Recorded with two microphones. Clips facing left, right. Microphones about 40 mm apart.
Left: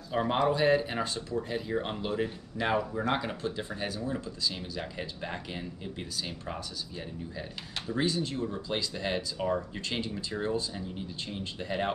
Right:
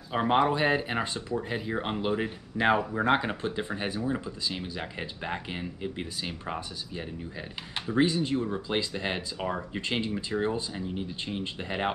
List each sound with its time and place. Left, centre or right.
0.1 s speech: right
7.9 s speech: right